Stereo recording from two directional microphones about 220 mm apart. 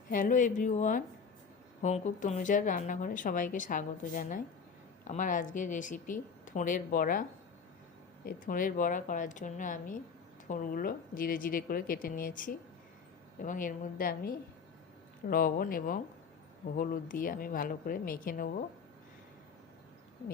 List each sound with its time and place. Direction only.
0.1 s speech: 35° left (ahead or behind)
8.3 s speech: 40° left (ahead or behind)